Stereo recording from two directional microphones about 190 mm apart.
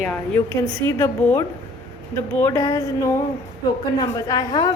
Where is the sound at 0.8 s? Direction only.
15° left (ahead or behind).